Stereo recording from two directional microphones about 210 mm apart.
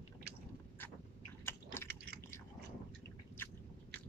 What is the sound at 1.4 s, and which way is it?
Chewing, 10° left (ahead or behind).